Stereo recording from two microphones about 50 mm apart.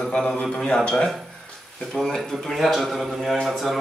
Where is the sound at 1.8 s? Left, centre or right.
Centre.